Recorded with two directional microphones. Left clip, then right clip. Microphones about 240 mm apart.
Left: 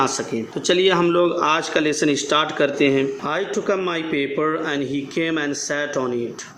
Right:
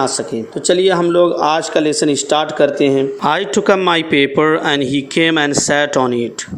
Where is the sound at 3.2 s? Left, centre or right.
Right.